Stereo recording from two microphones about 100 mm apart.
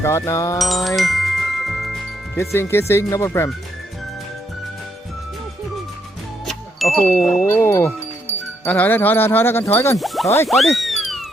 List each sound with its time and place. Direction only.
0.0 s speech: 30° left (ahead or behind)
0.6 s music: centre (ahead or behind)
2.3 s speech: 25° left (ahead or behind)
6.4 s music: centre (ahead or behind)
7.1 s wind chime: centre (ahead or behind)
7.4 s speech: 25° left (ahead or behind)
10.5 s music: centre (ahead or behind)